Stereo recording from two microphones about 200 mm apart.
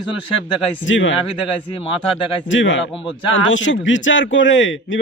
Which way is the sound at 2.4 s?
70° left (ahead or behind).